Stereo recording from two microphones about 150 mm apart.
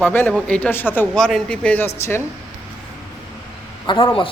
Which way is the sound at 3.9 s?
30° left (ahead or behind).